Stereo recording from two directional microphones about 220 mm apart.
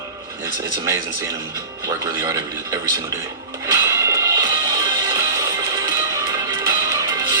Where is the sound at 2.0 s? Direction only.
15° right (ahead or behind).